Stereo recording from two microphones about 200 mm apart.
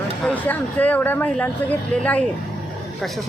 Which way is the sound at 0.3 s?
10° left (ahead or behind).